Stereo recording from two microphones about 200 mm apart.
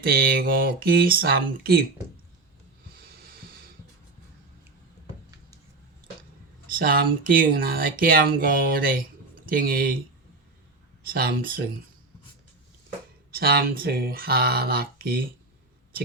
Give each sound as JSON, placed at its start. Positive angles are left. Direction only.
{"t": 0.0, "sound": "speech", "side_deg": -50}
{"t": 2.9, "sound": "music", "side_deg": -45}
{"t": 6.7, "sound": "speech", "side_deg": -45}
{"t": 11.1, "sound": "speech", "side_deg": -45}
{"t": 13.3, "sound": "speech", "side_deg": -50}